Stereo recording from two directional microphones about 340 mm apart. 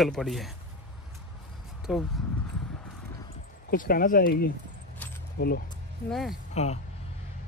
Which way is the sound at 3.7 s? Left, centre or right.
Left.